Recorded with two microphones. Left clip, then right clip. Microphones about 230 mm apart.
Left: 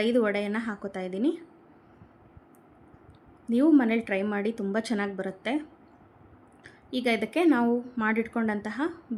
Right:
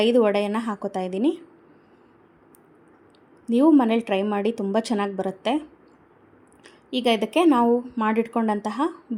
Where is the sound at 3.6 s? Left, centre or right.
Centre.